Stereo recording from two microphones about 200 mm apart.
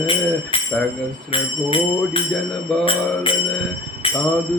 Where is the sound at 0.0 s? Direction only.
25° left (ahead or behind).